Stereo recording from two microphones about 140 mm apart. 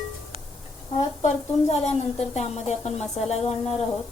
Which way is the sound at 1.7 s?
50° left (ahead or behind).